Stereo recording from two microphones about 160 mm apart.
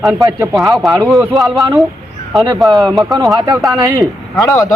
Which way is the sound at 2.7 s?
Centre (ahead or behind).